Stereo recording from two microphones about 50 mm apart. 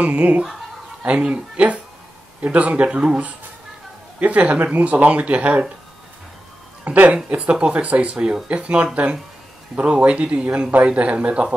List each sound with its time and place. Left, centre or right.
0.0 s speech: right
6.8 s speech: right